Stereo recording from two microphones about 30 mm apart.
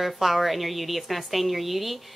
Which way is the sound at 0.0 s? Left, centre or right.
Centre.